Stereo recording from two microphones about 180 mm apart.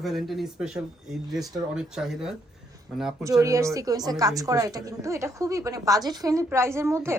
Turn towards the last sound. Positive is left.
turn(degrees=-15)  # may be behind; listen again after turning